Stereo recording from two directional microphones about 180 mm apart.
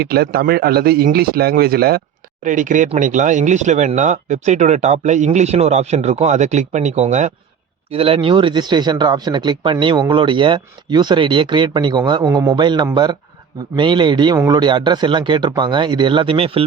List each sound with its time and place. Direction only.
0.0 s a man's voice: 60° right (ahead or behind)
2.4 s speech: 45° right (ahead or behind)